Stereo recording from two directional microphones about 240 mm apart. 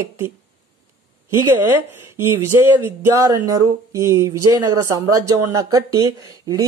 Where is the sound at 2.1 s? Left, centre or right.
Centre.